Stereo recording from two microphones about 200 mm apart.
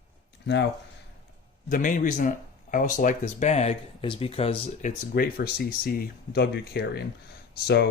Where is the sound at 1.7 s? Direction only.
40° left (ahead or behind).